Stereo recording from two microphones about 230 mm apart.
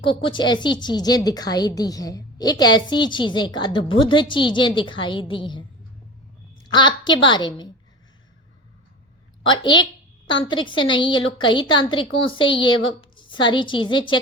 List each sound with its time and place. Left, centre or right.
0.0 s a woman's voice: left
6.7 s a woman's voice: centre
9.4 s a woman's voice: centre